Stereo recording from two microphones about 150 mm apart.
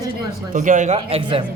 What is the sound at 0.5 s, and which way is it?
Speech, 60° right (ahead or behind).